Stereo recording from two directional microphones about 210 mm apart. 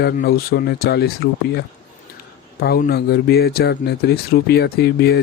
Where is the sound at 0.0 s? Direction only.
45° left (ahead or behind).